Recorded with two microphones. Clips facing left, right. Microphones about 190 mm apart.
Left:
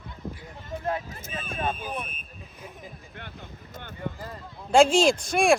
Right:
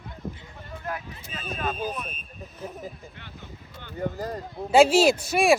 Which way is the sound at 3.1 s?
55° left (ahead or behind).